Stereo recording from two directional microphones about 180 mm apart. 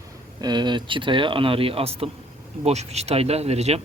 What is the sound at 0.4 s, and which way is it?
Speech, 25° right (ahead or behind).